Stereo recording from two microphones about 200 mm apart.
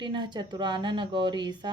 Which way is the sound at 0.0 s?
25° right (ahead or behind).